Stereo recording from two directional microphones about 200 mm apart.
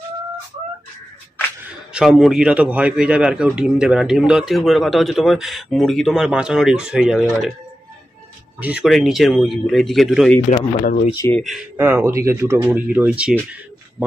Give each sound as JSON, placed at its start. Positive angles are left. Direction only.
{"t": 2.0, "sound": "a man's voice", "side_deg": 0}
{"t": 8.5, "sound": "a man's voice", "side_deg": -5}
{"t": 10.5, "sound": "speech", "side_deg": 30}
{"t": 11.1, "sound": "speech", "side_deg": 15}
{"t": 11.7, "sound": "speech", "side_deg": -10}